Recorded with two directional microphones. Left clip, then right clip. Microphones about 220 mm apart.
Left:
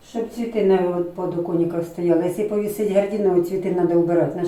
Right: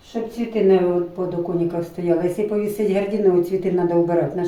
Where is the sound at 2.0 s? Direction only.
Centre (ahead or behind).